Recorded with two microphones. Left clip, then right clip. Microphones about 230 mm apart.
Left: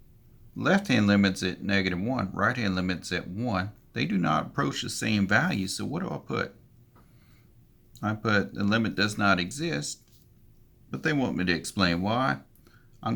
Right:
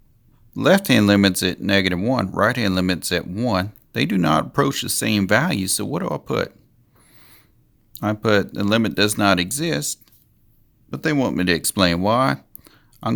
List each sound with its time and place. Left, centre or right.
0.5 s speech: right
7.9 s speech: right